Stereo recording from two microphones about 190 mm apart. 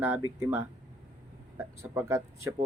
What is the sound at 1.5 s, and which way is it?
Speech, 15° right (ahead or behind).